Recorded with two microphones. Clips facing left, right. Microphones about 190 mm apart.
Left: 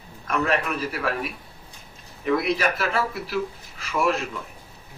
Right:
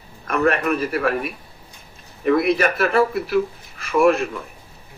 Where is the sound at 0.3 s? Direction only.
55° right (ahead or behind).